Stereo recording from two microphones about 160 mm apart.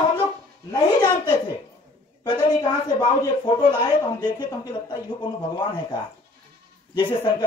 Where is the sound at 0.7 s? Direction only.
25° left (ahead or behind).